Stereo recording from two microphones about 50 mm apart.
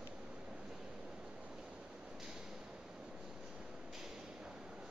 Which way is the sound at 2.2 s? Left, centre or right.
Centre.